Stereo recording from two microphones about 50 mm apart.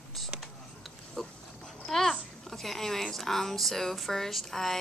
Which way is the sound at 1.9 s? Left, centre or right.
Centre.